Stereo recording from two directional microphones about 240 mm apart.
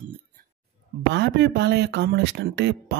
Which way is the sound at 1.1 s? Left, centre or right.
Right.